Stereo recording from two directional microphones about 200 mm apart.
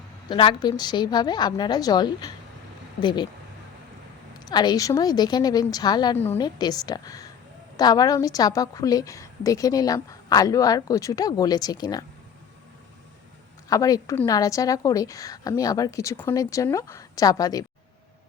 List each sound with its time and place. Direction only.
0.3 s a woman's voice: 25° left (ahead or behind)
4.4 s a woman's voice: 20° left (ahead or behind)
13.7 s a woman's voice: 15° left (ahead or behind)